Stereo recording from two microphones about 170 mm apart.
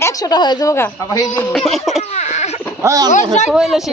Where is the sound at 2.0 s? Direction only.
40° left (ahead or behind).